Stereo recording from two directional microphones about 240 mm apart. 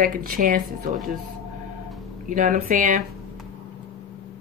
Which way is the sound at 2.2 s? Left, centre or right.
Right.